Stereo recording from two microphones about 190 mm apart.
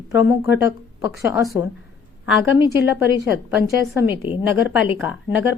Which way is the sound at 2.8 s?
10° right (ahead or behind).